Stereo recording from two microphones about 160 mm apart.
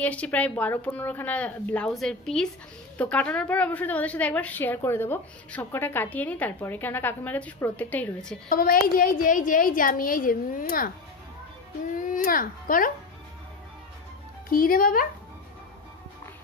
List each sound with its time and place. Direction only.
0.0 s a woman's voice: 10° left (ahead or behind)
8.5 s a woman's voice: 65° left (ahead or behind)
12.0 s a woman's voice: 60° left (ahead or behind)
14.5 s a woman's voice: 65° left (ahead or behind)